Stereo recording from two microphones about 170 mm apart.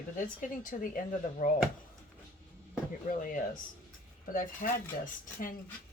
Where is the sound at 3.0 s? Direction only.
55° left (ahead or behind).